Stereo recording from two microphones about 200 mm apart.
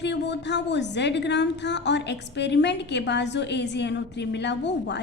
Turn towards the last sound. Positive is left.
turn(degrees=60)  # may be behind; listen again after turning